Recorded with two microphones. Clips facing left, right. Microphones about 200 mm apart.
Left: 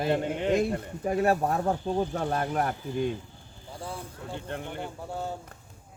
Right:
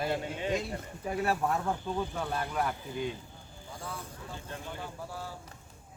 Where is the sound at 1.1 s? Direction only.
40° left (ahead or behind).